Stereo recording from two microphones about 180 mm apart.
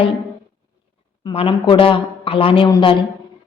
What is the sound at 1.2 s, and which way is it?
A woman's voice, 30° left (ahead or behind).